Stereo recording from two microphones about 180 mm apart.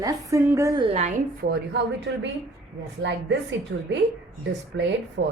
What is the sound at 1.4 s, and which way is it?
Speech, 55° right (ahead or behind).